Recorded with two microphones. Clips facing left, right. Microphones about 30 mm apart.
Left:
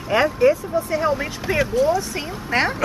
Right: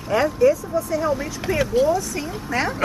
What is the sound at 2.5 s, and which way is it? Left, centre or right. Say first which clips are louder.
Speech: left 3 dB; left.